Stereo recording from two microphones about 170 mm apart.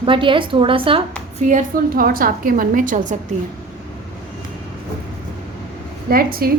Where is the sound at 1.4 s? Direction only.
45° right (ahead or behind).